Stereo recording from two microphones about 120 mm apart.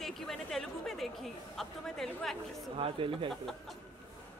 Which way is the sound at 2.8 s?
45° right (ahead or behind).